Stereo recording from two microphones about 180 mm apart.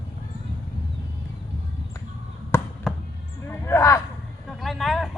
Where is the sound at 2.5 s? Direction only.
15° left (ahead or behind).